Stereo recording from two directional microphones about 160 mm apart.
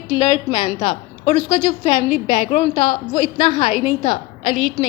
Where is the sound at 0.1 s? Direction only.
30° left (ahead or behind).